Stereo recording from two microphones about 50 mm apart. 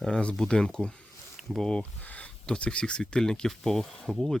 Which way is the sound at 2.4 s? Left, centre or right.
Centre.